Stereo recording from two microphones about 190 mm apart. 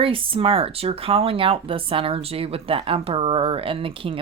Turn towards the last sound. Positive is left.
turn(degrees=-30)  # may be behind; listen again after turning